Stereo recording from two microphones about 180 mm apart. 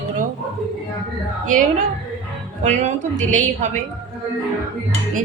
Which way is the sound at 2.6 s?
40° right (ahead or behind).